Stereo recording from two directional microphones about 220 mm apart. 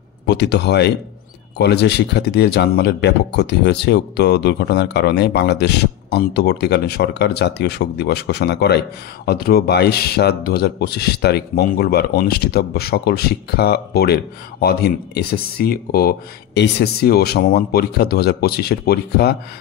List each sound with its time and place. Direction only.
0.3 s speech: 50° left (ahead or behind)